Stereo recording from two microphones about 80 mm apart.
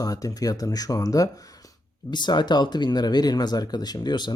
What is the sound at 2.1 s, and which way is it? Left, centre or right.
Speech, left.